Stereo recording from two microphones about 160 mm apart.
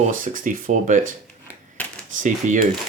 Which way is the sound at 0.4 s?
55° right (ahead or behind).